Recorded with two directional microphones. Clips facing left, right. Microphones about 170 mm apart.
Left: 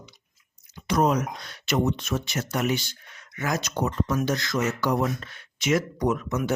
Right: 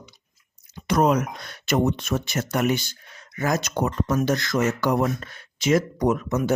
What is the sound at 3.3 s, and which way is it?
Speech, 40° right (ahead or behind).